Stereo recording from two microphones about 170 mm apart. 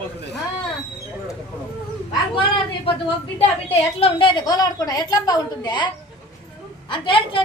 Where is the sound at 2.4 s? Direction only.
30° left (ahead or behind).